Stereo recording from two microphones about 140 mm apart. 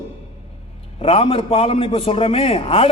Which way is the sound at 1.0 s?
40° left (ahead or behind).